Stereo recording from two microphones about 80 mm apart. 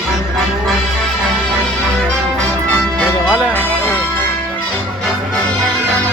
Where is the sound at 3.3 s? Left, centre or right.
Centre.